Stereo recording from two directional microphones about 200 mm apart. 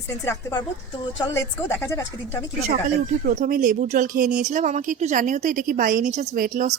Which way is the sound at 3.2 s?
40° right (ahead or behind).